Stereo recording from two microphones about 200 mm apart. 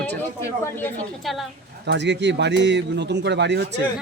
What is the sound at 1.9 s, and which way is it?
A man's voice, 60° right (ahead or behind).